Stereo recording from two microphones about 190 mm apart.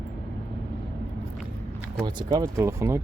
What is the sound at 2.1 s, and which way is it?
Speech, 25° right (ahead or behind).